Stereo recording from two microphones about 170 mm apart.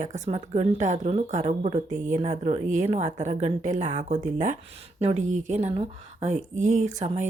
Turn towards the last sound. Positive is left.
turn(degrees=-45)  # may be behind; listen again after turning